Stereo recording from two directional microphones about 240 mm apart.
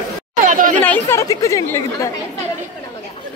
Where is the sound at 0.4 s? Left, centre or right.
Right.